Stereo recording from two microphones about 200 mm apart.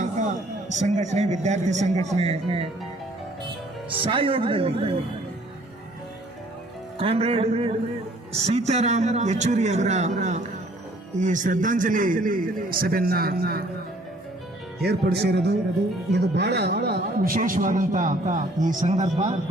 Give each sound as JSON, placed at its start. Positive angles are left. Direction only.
{"t": 0.7, "sound": "a man's voice", "side_deg": -35}
{"t": 4.0, "sound": "speech", "side_deg": -25}
{"t": 7.0, "sound": "a man's voice", "side_deg": -30}
{"t": 14.8, "sound": "a man's voice", "side_deg": -55}